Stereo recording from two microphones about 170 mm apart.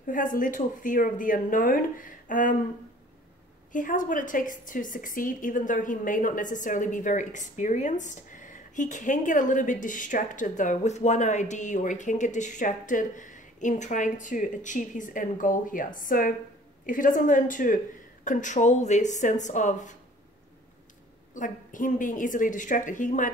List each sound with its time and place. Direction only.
0.0 s a woman's voice: 50° left (ahead or behind)
3.7 s a woman's voice: 50° left (ahead or behind)
21.3 s a woman's voice: 50° left (ahead or behind)